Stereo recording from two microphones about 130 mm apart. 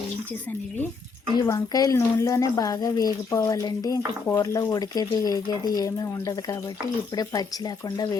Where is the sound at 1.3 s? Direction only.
30° left (ahead or behind).